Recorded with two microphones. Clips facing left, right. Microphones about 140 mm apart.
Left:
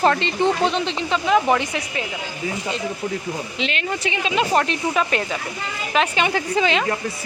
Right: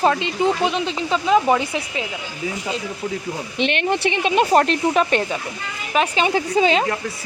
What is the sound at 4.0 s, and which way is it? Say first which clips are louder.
Speech: right 4 dB; 55° right (ahead or behind).